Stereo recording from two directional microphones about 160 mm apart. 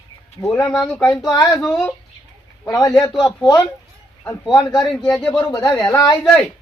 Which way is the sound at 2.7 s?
25° left (ahead or behind).